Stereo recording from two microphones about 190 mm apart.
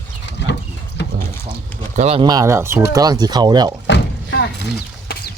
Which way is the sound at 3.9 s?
65° left (ahead or behind).